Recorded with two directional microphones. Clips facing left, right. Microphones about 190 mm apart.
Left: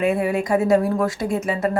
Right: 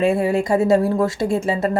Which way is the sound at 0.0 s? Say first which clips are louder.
Right 2 dB; 30° right (ahead or behind).